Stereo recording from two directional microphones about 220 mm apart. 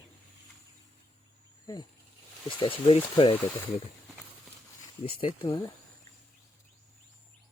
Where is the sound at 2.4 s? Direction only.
25° left (ahead or behind).